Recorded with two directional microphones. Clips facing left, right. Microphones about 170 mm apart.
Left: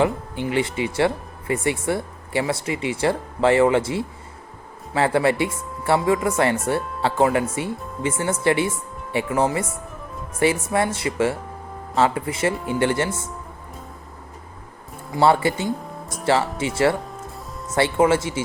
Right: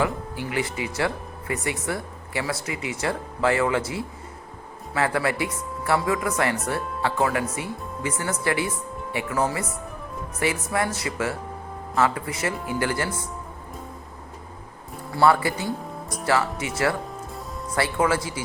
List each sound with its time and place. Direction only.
0.0 s speech: 25° left (ahead or behind)
15.1 s speech: 25° left (ahead or behind)